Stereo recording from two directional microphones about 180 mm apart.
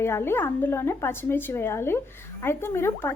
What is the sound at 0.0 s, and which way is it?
A woman's voice, 15° left (ahead or behind).